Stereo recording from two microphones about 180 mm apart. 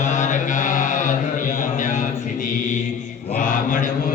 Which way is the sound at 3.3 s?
45° left (ahead or behind).